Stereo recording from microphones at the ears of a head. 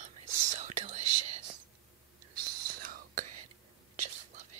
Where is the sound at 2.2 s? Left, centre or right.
Right.